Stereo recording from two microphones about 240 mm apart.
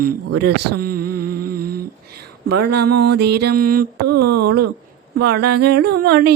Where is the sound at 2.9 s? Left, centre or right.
Right.